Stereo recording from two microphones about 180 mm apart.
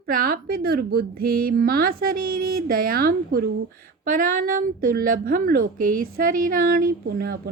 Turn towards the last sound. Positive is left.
turn(degrees=-60)  # may be behind; listen again after turning